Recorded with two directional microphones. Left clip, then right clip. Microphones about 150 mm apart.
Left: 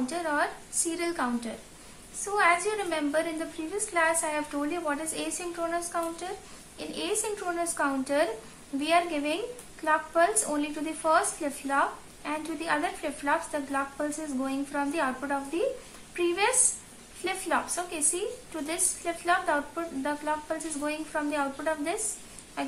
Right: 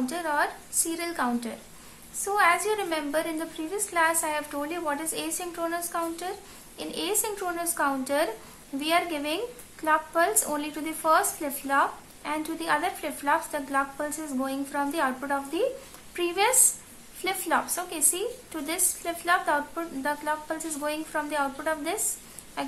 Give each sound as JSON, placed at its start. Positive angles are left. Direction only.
{"t": 0.0, "sound": "a woman's voice", "side_deg": -20}
{"t": 19.0, "sound": "a woman's voice", "side_deg": -25}